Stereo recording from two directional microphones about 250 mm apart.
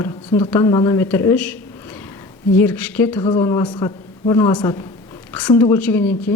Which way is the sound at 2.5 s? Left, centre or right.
Centre.